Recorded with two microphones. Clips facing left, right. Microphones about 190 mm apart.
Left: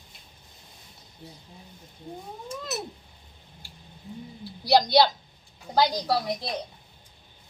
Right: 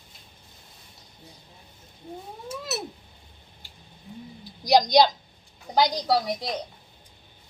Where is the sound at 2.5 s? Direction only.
5° right (ahead or behind).